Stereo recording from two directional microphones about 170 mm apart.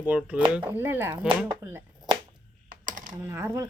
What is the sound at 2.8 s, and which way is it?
Typing, 50° right (ahead or behind).